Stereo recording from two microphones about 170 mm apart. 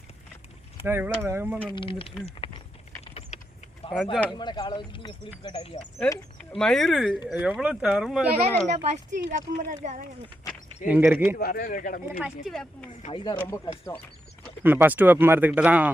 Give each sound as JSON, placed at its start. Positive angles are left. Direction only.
{"t": 0.9, "sound": "speech", "side_deg": -10}
{"t": 1.7, "sound": "speech", "side_deg": 30}
{"t": 2.2, "sound": "a sound", "side_deg": 30}
{"t": 3.0, "sound": "typing", "side_deg": 40}
{"t": 3.9, "sound": "speech", "side_deg": 0}
{"t": 4.4, "sound": "speech", "side_deg": 25}
{"t": 6.5, "sound": "speech", "side_deg": 5}
{"t": 8.7, "sound": "speech", "side_deg": -40}
{"t": 10.8, "sound": "speech", "side_deg": -10}
{"t": 11.3, "sound": "speech", "side_deg": 60}
{"t": 12.2, "sound": "speech", "side_deg": 0}
{"t": 13.1, "sound": "speech", "side_deg": 30}
{"t": 13.4, "sound": "speech", "side_deg": 15}
{"t": 14.6, "sound": "speech", "side_deg": -10}